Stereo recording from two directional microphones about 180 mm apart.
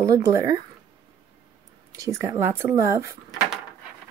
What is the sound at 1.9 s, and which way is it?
Speech, 15° right (ahead or behind).